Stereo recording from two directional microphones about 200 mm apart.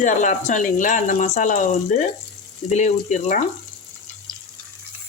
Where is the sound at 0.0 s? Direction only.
40° left (ahead or behind).